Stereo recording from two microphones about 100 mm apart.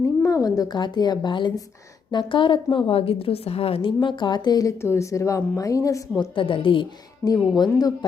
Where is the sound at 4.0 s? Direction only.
50° left (ahead or behind); by 6.0 s 35° left (ahead or behind).